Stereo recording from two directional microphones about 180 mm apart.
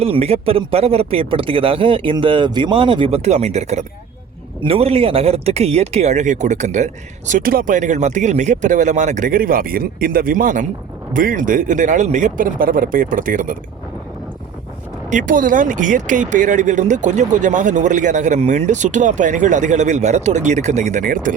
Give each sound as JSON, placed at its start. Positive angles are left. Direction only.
{"t": 0.0, "sound": "speech", "side_deg": -35}
{"t": 15.1, "sound": "speech", "side_deg": -50}